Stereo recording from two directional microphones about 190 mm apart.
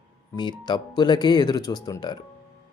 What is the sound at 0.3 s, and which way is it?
Speech, 20° left (ahead or behind).